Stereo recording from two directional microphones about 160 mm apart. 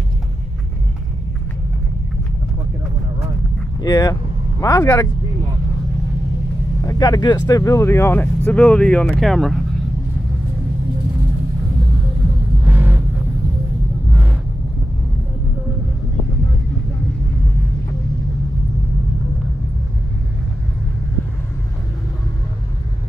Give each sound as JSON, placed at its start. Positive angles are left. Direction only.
{"t": 3.8, "sound": "speech", "side_deg": 20}
{"t": 6.8, "sound": "speech", "side_deg": 20}
{"t": 12.6, "sound": "vehicle", "side_deg": -10}